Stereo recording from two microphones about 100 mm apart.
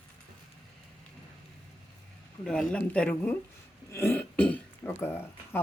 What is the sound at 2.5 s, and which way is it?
Speech, 10° left (ahead or behind).